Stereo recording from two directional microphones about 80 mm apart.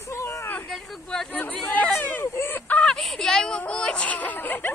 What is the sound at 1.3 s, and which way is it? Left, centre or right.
Chatter, left.